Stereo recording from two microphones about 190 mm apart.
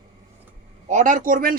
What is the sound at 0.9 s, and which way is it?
Speech, 40° right (ahead or behind).